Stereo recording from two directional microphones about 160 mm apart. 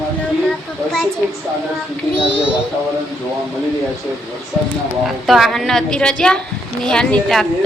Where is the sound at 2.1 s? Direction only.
35° left (ahead or behind).